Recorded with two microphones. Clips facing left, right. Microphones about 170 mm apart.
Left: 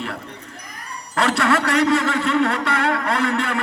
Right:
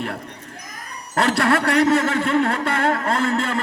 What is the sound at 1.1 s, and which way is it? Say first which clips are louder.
A man's voice: even; 50° right (ahead or behind).